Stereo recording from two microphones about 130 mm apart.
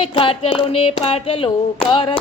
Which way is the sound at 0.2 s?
45° left (ahead or behind).